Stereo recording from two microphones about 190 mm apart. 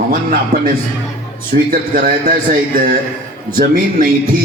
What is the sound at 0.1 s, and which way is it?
A man's voice, 45° right (ahead or behind).